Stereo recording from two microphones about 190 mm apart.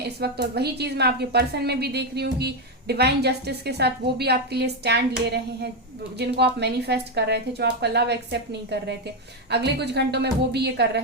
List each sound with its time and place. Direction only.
0.2 s a woman's voice: 60° right (ahead or behind)